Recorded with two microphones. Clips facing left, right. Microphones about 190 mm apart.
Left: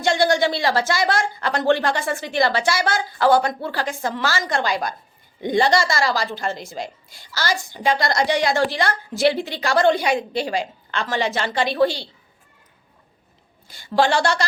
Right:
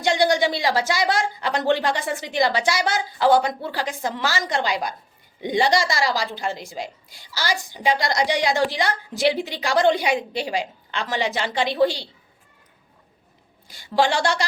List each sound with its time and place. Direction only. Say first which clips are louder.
0.0 s a woman's voice: left 1 dB; 15° right (ahead or behind)
13.7 s a woman's voice: left 2 dB; 15° right (ahead or behind)